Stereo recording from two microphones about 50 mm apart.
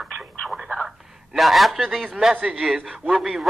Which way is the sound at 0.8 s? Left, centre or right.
Centre.